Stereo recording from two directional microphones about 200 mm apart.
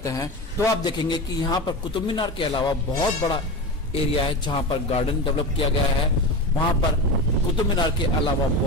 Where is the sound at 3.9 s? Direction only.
25° left (ahead or behind).